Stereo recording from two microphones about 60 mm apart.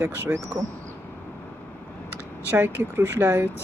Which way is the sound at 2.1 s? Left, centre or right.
Right.